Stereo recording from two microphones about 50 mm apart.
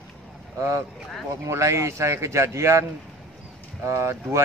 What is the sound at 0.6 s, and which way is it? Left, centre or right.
A man's voice, right.